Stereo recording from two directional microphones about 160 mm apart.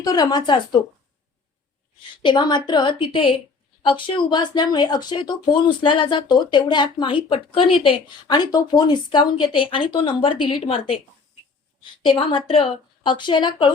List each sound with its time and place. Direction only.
0.0 s speech: 25° left (ahead or behind)
2.2 s a woman's voice: 30° left (ahead or behind)